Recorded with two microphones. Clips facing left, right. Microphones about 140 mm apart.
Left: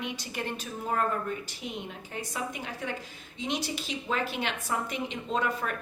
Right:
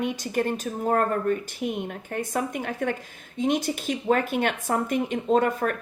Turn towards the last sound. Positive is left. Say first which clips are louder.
# right 8 dB
turn(degrees=-50)  # may be behind; listen again after turning